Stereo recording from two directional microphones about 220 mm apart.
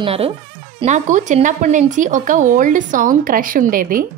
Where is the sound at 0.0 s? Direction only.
25° right (ahead or behind).